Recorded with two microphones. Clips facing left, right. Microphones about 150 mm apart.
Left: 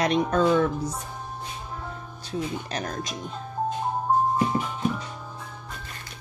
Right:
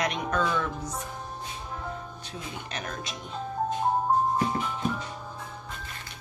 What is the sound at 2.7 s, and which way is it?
Speech, 35° left (ahead or behind).